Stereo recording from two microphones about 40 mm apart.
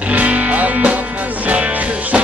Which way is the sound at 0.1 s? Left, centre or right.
Right.